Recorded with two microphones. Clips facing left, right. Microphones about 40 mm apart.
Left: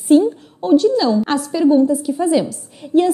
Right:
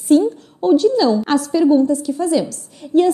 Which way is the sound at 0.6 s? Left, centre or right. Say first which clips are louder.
Even; centre.